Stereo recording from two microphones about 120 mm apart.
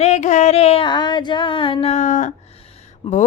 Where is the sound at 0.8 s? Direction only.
40° left (ahead or behind).